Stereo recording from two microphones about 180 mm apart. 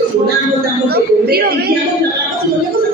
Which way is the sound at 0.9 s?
60° right (ahead or behind).